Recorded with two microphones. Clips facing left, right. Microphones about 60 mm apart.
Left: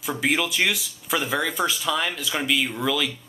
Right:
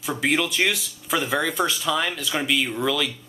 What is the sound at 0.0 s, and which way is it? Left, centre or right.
Speech, centre.